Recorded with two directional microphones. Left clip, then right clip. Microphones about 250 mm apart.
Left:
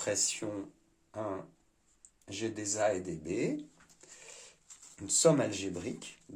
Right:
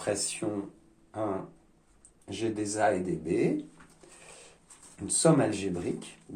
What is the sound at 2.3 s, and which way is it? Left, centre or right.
Speech, left.